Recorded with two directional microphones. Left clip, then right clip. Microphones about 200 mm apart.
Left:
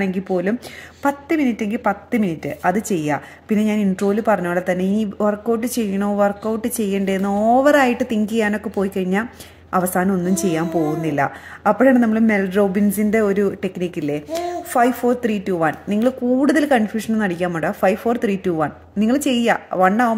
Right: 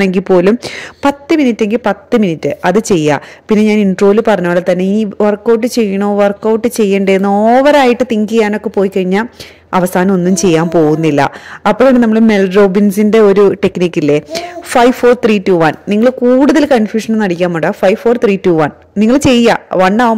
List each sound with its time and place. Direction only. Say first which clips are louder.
0.0 s a woman's voice: right 12 dB; 50° right (ahead or behind)